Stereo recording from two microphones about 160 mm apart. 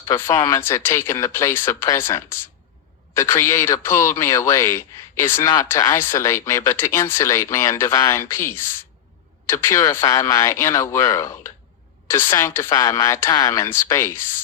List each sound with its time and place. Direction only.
0.0 s speech: 15° left (ahead or behind)